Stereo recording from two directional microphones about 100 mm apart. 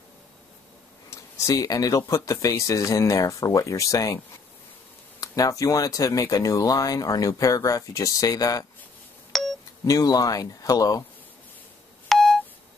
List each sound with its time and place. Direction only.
1.1 s speech: 35° left (ahead or behind)
5.2 s speech: 35° left (ahead or behind)
9.3 s a sound: centre (ahead or behind)
9.8 s speech: 40° left (ahead or behind)
12.1 s telephone dialing: centre (ahead or behind)